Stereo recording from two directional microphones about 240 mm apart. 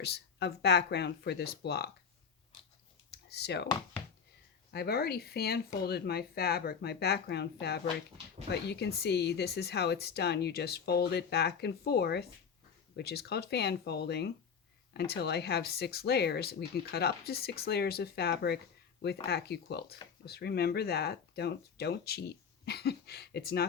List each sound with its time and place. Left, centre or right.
0.0 s speech: left
3.1 s computer keyboard: left
4.7 s speech: left